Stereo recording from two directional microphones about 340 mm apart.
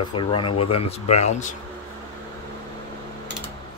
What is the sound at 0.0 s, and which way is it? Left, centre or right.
Speech, centre.